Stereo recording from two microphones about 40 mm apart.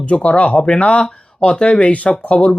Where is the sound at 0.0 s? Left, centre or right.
Left.